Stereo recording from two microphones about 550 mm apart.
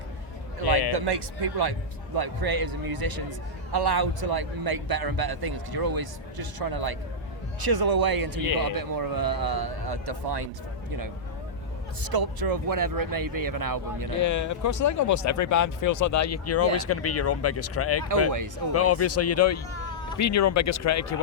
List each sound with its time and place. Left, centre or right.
0.9 s a man's voice: right
12.0 s a man's voice: right
14.2 s speech: left